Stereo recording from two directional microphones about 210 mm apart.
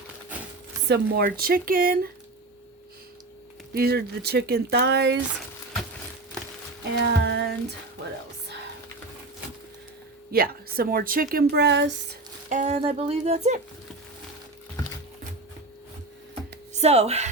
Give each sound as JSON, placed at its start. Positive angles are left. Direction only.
{"t": 0.9, "sound": "a woman's voice", "side_deg": -50}
{"t": 3.8, "sound": "a woman's voice", "side_deg": -50}
{"t": 7.0, "sound": "female singing", "side_deg": -55}
{"t": 10.3, "sound": "a woman's voice", "side_deg": -45}
{"t": 12.5, "sound": "speech", "side_deg": -35}
{"t": 16.7, "sound": "speech", "side_deg": -30}